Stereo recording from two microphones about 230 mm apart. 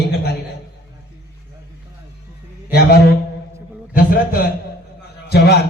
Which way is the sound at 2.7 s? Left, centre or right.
Left.